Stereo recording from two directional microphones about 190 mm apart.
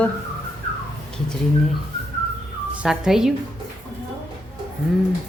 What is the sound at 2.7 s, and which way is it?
Speech, 5° right (ahead or behind).